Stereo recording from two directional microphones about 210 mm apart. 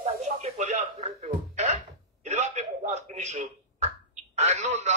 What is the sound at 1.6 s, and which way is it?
Cough, 30° right (ahead or behind).